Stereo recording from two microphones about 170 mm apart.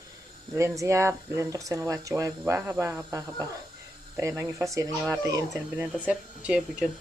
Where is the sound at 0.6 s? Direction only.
15° right (ahead or behind).